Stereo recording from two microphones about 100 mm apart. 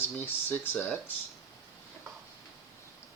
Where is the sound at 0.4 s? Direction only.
20° left (ahead or behind).